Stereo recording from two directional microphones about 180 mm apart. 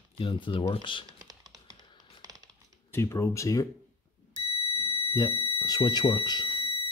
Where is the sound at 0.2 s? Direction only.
30° left (ahead or behind).